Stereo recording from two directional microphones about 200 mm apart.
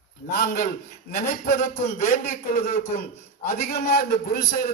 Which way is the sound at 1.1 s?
35° left (ahead or behind).